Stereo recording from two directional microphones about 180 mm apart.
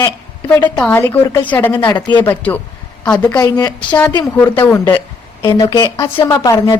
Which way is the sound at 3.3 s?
20° left (ahead or behind).